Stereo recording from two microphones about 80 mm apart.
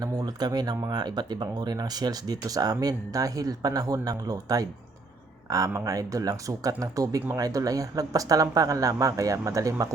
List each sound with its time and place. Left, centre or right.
0.0 s speech: right